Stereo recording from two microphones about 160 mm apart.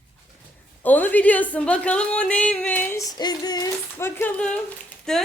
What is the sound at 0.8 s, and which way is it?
A woman's voice, 10° left (ahead or behind).